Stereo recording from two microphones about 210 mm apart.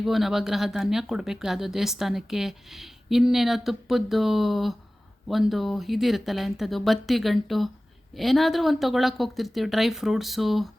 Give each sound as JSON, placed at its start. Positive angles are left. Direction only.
{"t": 0.0, "sound": "speech", "side_deg": 0}